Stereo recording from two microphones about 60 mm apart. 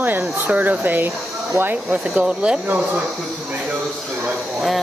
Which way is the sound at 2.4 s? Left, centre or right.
Right.